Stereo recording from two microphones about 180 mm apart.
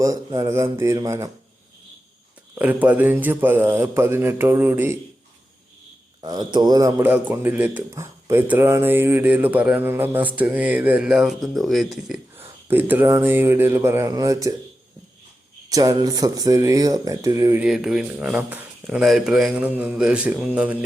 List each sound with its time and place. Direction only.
0.0 s a man's voice: 20° right (ahead or behind)
2.6 s a man's voice: 10° right (ahead or behind)
6.2 s a man's voice: 25° right (ahead or behind)
15.7 s speech: 20° right (ahead or behind)
17.6 s a man's voice: 5° right (ahead or behind)